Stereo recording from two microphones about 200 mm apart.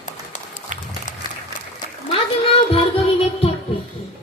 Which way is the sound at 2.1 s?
30° left (ahead or behind).